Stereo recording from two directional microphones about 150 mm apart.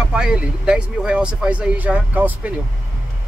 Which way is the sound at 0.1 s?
5° right (ahead or behind).